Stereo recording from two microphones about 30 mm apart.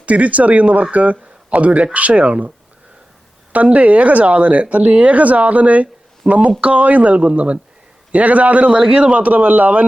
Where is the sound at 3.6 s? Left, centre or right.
Right.